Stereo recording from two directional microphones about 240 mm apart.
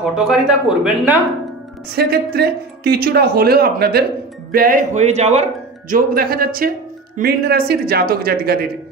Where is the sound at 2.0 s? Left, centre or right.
Right.